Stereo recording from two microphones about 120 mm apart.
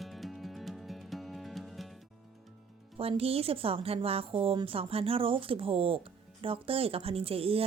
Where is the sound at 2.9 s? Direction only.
55° right (ahead or behind).